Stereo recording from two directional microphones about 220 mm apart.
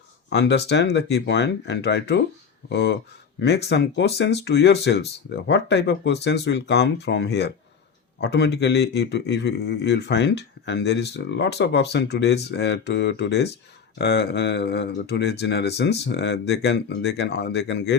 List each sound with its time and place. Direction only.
0.3 s speech: 50° left (ahead or behind)